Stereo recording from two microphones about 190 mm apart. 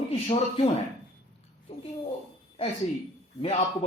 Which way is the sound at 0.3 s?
30° left (ahead or behind).